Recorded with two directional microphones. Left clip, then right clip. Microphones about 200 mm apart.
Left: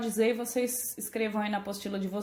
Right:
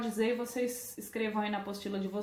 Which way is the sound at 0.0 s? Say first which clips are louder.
Left 4 dB; 45° left (ahead or behind).